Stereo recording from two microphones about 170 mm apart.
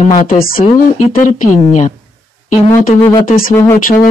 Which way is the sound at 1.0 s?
45° left (ahead or behind).